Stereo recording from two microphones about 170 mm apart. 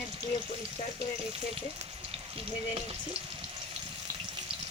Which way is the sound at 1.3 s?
35° right (ahead or behind).